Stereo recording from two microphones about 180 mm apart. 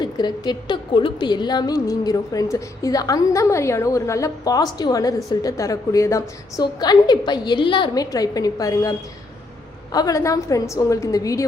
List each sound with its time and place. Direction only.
0.0 s a woman's voice: 25° left (ahead or behind)